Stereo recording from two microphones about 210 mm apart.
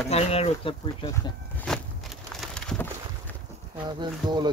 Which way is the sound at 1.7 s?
5° left (ahead or behind).